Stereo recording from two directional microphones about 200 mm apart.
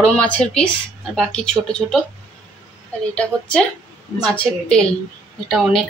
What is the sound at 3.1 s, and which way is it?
A woman's voice, 5° left (ahead or behind).